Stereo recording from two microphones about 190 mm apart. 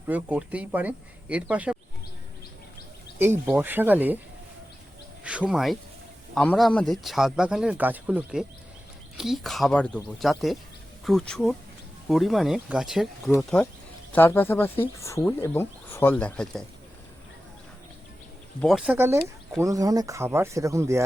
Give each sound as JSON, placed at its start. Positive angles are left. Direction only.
{"t": 0.1, "sound": "speech", "side_deg": -10}
{"t": 3.2, "sound": "speech", "side_deg": -10}
{"t": 5.2, "sound": "a sound", "side_deg": -5}
{"t": 6.3, "sound": "speech", "side_deg": 5}
{"t": 18.6, "sound": "speech", "side_deg": 0}